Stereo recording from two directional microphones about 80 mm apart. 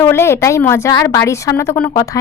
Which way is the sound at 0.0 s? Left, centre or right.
Left.